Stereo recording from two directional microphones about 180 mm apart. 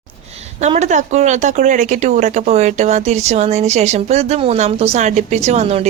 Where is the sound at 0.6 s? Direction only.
40° right (ahead or behind).